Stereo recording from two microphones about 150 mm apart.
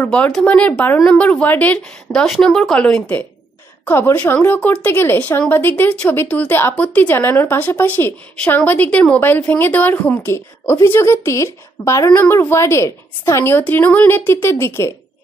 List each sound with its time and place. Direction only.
0.0 s speech: 10° left (ahead or behind)